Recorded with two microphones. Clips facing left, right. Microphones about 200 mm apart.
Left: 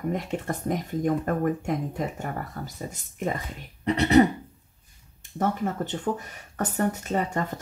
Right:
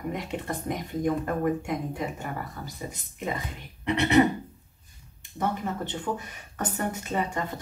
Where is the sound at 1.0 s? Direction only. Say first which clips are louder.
Left 1 dB; 45° left (ahead or behind).